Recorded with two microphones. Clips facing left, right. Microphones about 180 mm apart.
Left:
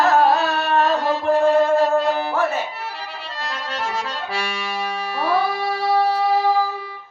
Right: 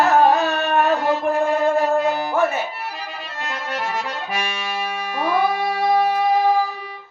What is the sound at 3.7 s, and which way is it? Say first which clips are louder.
Accordion: even; 15° right (ahead or behind).